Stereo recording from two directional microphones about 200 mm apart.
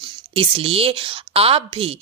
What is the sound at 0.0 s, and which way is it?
A woman's voice, 25° right (ahead or behind).